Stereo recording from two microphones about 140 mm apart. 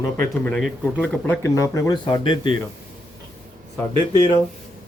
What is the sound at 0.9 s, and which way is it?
Speech, 10° left (ahead or behind).